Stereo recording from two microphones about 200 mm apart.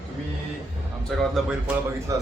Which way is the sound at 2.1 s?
15° right (ahead or behind).